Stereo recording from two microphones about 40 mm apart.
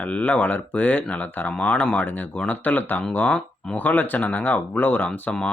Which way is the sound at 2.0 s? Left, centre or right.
Left.